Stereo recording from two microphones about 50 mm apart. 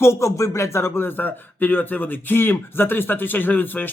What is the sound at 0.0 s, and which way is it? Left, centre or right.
Speech, left.